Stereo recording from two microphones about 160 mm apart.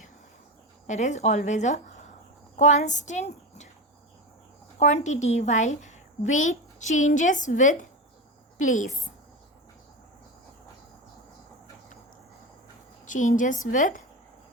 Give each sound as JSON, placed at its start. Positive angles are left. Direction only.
{"t": 0.9, "sound": "a woman's voice", "side_deg": 50}
{"t": 4.8, "sound": "a woman's voice", "side_deg": 45}
{"t": 13.1, "sound": "a woman's voice", "side_deg": 55}